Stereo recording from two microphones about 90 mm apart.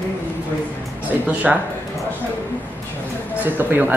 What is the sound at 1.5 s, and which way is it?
Speech, 5° right (ahead or behind).